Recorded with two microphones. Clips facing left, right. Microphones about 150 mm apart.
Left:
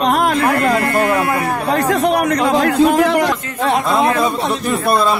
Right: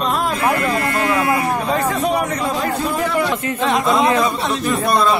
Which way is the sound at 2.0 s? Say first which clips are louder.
Left 4 dB; 75° left (ahead or behind).